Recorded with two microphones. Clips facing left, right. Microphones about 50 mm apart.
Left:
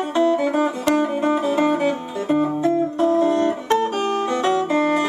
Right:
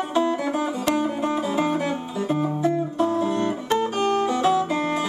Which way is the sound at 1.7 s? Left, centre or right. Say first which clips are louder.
Left 5 dB; centre.